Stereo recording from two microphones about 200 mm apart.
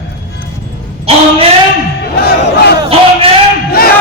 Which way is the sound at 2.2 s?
50° left (ahead or behind).